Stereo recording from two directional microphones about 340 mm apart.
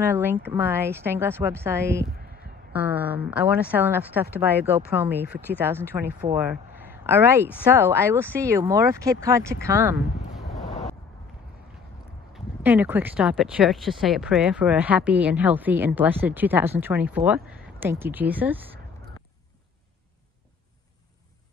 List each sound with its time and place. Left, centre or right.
0.0 s a woman's voice: centre
5.3 s a woman's voice: centre
5.6 s speech: centre
10.7 s a sound: centre
12.4 s a woman's voice: centre